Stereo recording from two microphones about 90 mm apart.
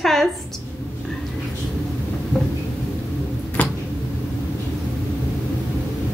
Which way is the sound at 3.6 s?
15° left (ahead or behind).